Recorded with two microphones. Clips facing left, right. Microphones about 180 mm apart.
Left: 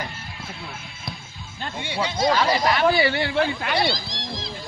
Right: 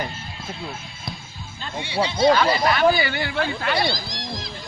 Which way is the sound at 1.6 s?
50° left (ahead or behind).